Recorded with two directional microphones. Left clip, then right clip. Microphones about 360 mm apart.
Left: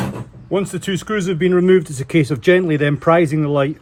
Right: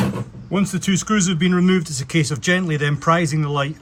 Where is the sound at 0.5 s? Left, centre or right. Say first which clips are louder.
Left 2 dB; centre.